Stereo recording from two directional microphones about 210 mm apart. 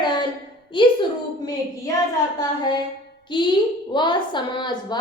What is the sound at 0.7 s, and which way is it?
Speech, 25° left (ahead or behind).